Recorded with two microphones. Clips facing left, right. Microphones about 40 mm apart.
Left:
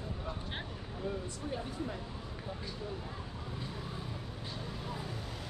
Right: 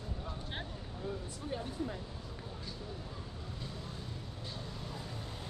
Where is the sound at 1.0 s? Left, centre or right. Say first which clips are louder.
Left 3 dB; centre.